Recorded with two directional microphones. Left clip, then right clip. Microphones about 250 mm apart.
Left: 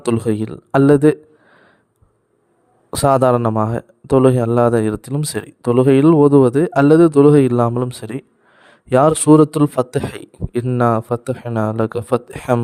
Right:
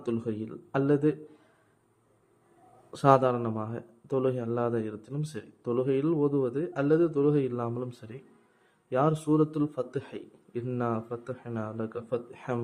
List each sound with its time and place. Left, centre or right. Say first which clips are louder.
0.0 s speech: left 14 dB; left
2.9 s speech: left 10 dB; left